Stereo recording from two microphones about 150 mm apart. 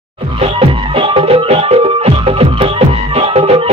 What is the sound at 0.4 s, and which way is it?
Music, 35° right (ahead or behind).